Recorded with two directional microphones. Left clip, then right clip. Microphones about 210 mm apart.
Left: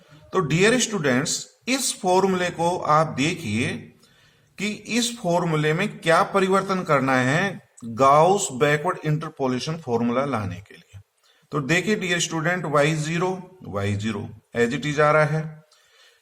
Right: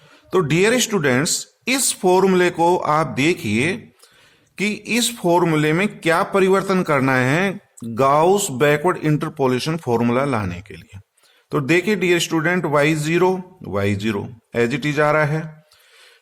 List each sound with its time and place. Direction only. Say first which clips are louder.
0.3 s a man's voice: right 3 dB; 45° right (ahead or behind)